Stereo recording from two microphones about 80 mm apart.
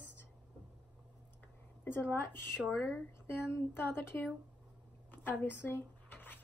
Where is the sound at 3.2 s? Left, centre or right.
Left.